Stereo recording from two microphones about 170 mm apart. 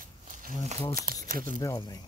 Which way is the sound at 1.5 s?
20° left (ahead or behind).